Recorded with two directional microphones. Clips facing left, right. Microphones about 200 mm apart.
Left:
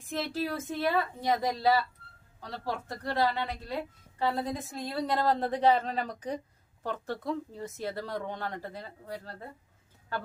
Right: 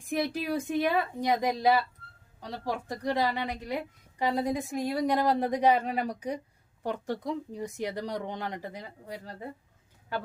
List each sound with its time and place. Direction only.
0.1 s a woman's voice: 15° right (ahead or behind)